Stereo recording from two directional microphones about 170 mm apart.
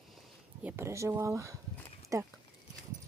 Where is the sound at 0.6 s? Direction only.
15° right (ahead or behind).